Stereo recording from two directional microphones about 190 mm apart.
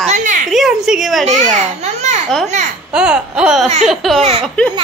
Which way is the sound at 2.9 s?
5° right (ahead or behind).